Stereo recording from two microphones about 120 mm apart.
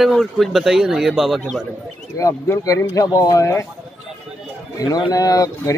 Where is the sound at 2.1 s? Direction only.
25° left (ahead or behind).